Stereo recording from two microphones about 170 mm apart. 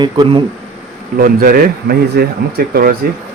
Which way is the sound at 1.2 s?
55° right (ahead or behind).